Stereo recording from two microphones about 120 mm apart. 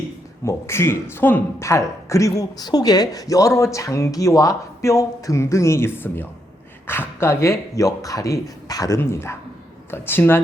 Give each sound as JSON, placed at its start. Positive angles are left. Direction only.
{"t": 0.4, "sound": "a woman's voice", "side_deg": 20}